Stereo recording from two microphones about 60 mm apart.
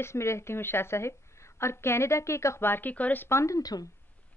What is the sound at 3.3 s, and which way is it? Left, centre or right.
Speech, left.